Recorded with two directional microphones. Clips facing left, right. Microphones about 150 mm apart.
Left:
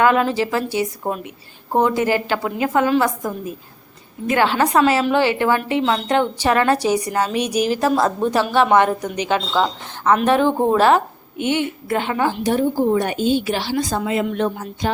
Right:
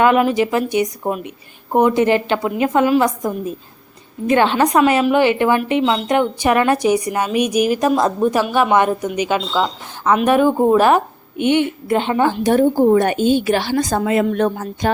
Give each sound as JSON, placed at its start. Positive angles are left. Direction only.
{"t": 0.0, "sound": "a woman's voice", "side_deg": -20}
{"t": 12.5, "sound": "a woman's voice", "side_deg": -50}